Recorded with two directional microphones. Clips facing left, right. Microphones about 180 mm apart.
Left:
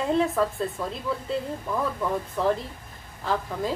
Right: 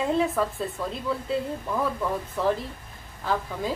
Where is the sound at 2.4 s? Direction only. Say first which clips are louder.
Left 1 dB; centre (ahead or behind).